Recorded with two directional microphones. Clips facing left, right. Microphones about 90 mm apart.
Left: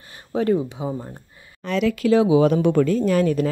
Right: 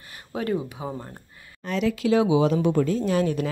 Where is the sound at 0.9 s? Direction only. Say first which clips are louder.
Left 5 dB; 5° left (ahead or behind).